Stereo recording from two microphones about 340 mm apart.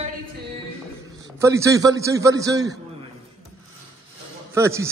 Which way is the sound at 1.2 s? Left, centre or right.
Centre.